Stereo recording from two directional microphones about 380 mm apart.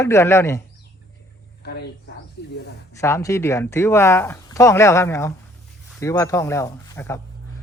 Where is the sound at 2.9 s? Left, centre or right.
Centre.